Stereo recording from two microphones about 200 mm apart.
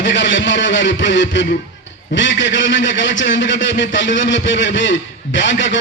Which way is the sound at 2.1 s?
65° left (ahead or behind).